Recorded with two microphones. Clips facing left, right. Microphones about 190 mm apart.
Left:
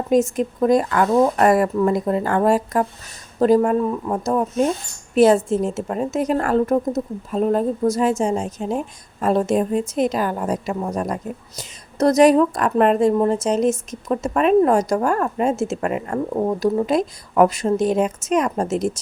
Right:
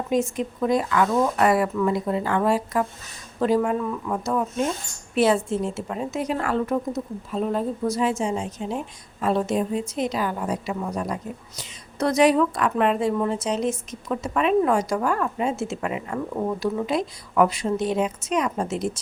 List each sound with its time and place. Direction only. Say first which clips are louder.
0.1 s speech: left 6 dB; 45° left (ahead or behind)